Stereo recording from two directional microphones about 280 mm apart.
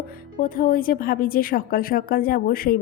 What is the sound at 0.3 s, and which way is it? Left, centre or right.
A woman's voice, left.